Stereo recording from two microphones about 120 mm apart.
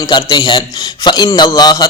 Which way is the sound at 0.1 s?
35° left (ahead or behind).